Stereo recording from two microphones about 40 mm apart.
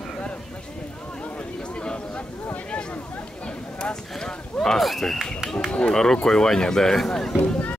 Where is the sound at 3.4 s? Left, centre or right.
Left.